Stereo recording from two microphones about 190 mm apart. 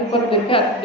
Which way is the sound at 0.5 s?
30° left (ahead or behind).